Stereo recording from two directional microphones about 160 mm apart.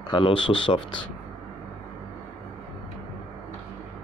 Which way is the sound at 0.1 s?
30° left (ahead or behind).